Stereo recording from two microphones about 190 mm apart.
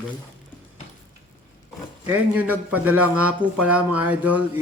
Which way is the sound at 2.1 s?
10° right (ahead or behind).